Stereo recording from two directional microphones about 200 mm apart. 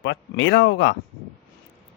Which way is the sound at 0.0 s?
60° left (ahead or behind).